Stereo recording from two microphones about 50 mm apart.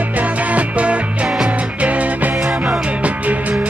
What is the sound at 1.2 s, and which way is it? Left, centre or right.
Music, centre.